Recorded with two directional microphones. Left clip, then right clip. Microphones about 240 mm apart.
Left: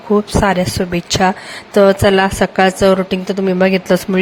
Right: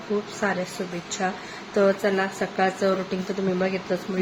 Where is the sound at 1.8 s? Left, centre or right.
Left.